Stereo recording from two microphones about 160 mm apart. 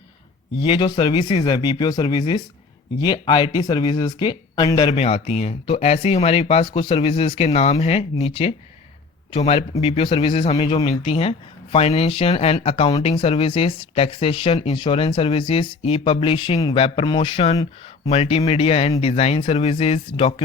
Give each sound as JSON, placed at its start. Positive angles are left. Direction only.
{"t": 0.6, "sound": "speech", "side_deg": 30}
{"t": 4.9, "sound": "speech", "side_deg": 40}